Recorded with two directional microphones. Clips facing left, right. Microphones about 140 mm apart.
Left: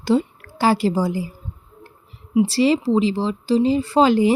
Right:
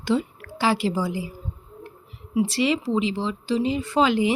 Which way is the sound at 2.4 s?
35° left (ahead or behind).